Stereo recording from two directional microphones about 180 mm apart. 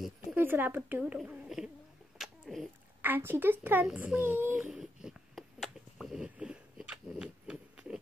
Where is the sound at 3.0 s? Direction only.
10° right (ahead or behind).